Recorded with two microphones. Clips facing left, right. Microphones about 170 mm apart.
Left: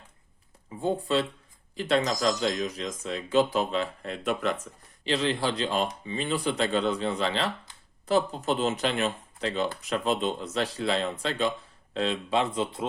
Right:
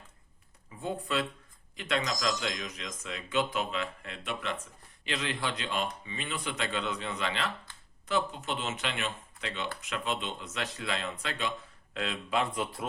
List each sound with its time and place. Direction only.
0.8 s speech: 30° left (ahead or behind)